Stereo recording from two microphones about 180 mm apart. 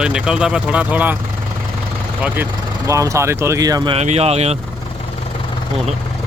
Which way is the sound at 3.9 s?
35° right (ahead or behind).